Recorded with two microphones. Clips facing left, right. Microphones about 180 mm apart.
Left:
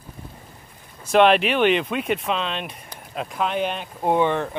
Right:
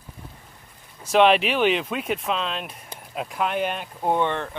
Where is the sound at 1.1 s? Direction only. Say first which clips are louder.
Left 1 dB; centre (ahead or behind).